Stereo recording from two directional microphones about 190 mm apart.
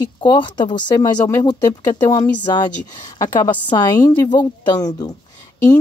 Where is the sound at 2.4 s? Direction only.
25° left (ahead or behind).